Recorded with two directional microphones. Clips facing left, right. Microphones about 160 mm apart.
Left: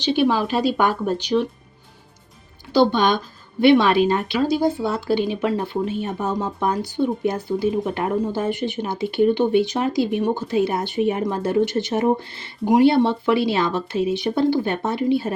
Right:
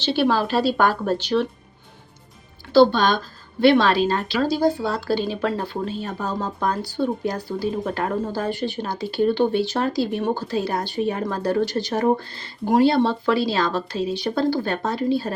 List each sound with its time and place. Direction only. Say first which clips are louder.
0.3 s speech: even; 15° left (ahead or behind)
2.7 s speech: right 2 dB; 20° left (ahead or behind)